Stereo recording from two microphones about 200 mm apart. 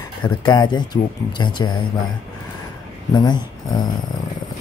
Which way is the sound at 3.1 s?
20° left (ahead or behind).